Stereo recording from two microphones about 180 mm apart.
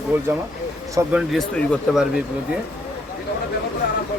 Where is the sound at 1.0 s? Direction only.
15° right (ahead or behind).